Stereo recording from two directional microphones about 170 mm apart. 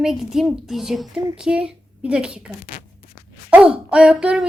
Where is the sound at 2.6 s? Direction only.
50° left (ahead or behind).